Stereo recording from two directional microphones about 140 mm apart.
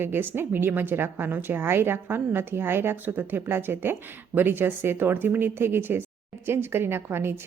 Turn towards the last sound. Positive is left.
turn(degrees=-15)  # may be behind; listen again after turning